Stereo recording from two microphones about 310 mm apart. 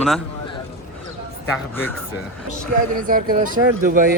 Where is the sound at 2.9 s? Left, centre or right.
Right.